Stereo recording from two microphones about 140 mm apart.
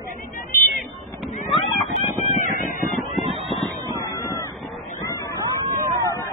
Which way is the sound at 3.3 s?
Centre (ahead or behind).